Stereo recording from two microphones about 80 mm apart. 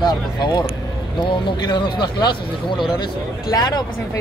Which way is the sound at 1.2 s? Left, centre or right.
Left.